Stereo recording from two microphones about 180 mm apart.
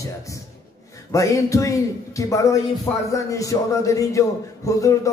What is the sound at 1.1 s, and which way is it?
A man's voice, 15° left (ahead or behind).